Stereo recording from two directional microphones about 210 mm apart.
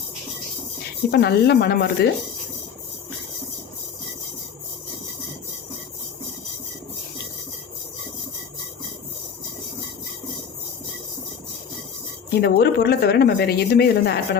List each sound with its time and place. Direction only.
1.1 s a woman's voice: 50° left (ahead or behind)
12.3 s a woman's voice: 50° left (ahead or behind)